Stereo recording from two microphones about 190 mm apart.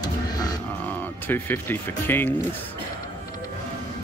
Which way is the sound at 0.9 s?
10° left (ahead or behind).